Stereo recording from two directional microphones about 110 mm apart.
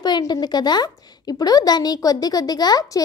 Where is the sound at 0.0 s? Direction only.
40° left (ahead or behind).